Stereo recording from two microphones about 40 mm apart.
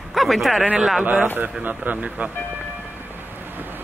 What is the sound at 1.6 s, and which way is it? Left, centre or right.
Speech, right.